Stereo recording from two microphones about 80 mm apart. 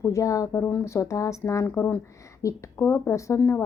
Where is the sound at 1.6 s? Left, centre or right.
Left.